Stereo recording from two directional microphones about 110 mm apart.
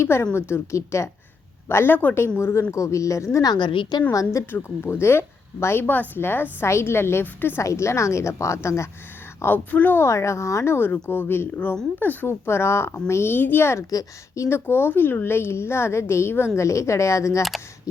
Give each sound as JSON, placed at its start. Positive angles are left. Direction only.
{"t": 0.0, "sound": "a woman's voice", "side_deg": 25}
{"t": 3.7, "sound": "a woman's voice", "side_deg": 50}
{"t": 4.1, "sound": "a woman's voice", "side_deg": 30}